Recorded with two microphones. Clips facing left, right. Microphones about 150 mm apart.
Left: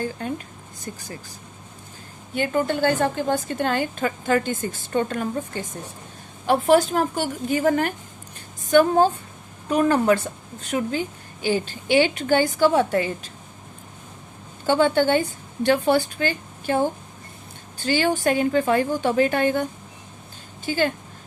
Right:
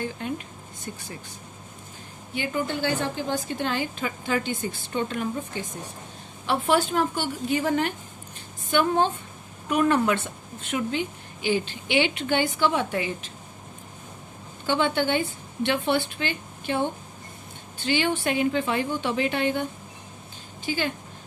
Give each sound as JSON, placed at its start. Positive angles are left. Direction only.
{"t": 0.0, "sound": "a woman's voice", "side_deg": 40}
{"t": 2.3, "sound": "a woman's voice", "side_deg": 50}
{"t": 14.7, "sound": "a woman's voice", "side_deg": 45}
{"t": 20.7, "sound": "a woman's voice", "side_deg": 45}